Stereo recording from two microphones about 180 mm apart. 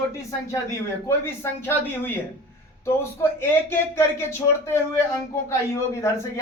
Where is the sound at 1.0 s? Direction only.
15° left (ahead or behind).